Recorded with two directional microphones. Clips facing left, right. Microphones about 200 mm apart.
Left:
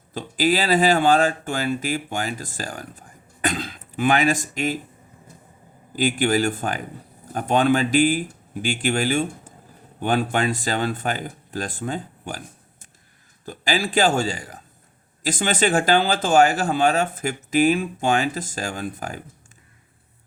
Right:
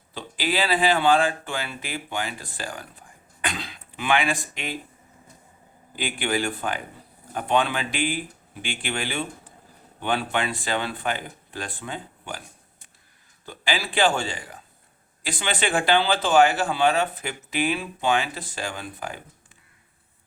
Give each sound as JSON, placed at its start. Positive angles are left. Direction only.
{"t": 0.1, "sound": "a man's voice", "side_deg": 45}
{"t": 3.4, "sound": "throat clearing", "side_deg": 45}
{"t": 6.0, "sound": "a man's voice", "side_deg": 45}
{"t": 13.4, "sound": "a man's voice", "side_deg": 45}